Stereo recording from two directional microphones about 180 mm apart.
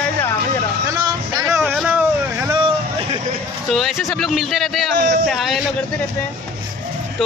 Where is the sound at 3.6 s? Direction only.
Centre (ahead or behind).